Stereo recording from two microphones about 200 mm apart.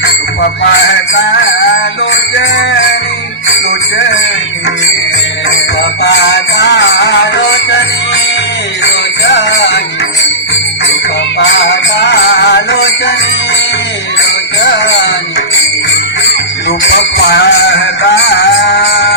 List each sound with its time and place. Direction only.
0.7 s music: 60° left (ahead or behind)
6.0 s music: 60° left (ahead or behind)
8.8 s jingle bell: 65° left (ahead or behind)
11.3 s music: 65° left (ahead or behind)
14.6 s music: 60° left (ahead or behind)
16.6 s a sound: 60° left (ahead or behind)